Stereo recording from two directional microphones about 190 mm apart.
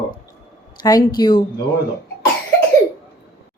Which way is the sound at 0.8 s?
20° left (ahead or behind).